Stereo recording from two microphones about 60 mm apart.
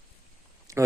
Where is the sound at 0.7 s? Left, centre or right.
Right.